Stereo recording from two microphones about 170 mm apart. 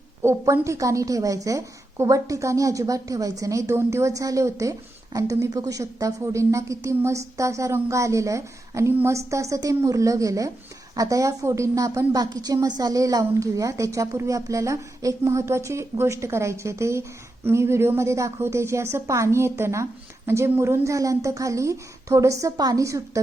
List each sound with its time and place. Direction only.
0.2 s a woman's voice: 15° right (ahead or behind)